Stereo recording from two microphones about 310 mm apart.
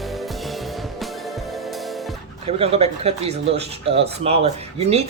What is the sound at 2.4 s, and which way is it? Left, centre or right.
Speech, centre.